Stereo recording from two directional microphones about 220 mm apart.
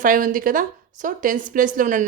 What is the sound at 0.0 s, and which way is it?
A woman's voice, 35° right (ahead or behind).